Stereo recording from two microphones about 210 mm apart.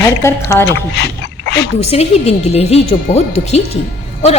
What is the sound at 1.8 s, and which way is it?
A woman's voice, 30° left (ahead or behind).